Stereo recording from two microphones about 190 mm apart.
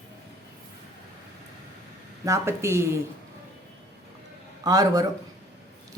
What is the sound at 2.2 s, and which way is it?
Speech, 15° right (ahead or behind).